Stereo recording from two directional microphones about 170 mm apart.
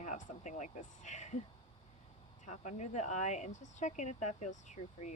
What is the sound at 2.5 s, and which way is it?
Speech, 45° left (ahead or behind).